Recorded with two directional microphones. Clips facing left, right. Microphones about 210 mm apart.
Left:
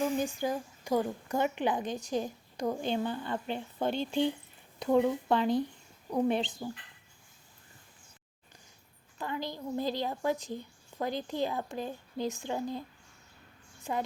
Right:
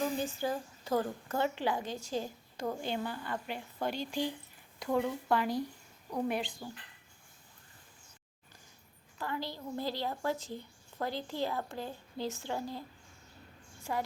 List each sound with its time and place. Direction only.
0.2 s a woman's voice: 15° left (ahead or behind)
9.1 s a woman's voice: 20° left (ahead or behind)
13.9 s speech: 20° left (ahead or behind)